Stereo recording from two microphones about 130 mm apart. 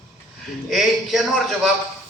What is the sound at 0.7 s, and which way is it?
A man's voice, centre (ahead or behind).